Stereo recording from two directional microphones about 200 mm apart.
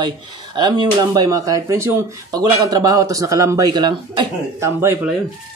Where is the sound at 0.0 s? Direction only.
20° right (ahead or behind).